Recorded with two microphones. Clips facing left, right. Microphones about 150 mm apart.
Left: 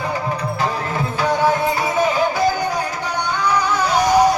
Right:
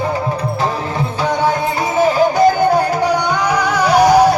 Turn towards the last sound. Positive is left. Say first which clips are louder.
# right 5 dB
turn(degrees=-65)  # may be behind; listen again after turning